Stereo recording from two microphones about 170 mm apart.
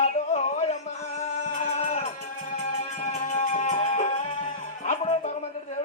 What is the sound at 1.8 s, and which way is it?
Music, 45° left (ahead or behind).